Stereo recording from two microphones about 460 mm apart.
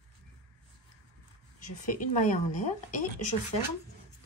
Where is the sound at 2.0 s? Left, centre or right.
Centre.